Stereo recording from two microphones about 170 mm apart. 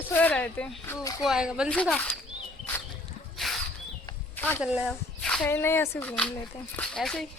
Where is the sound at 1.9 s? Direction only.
10° left (ahead or behind).